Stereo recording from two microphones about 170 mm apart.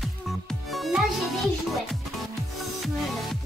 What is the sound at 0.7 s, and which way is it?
Music, centre (ahead or behind).